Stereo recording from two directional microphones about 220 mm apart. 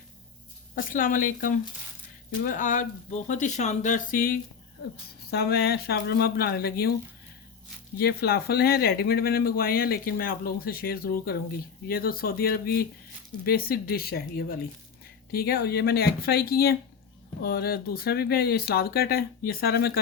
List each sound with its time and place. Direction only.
0.8 s speech: 40° left (ahead or behind)
7.9 s speech: 45° left (ahead or behind)